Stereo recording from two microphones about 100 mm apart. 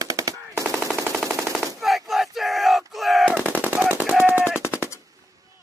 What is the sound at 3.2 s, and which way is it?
Machine gun, 15° right (ahead or behind).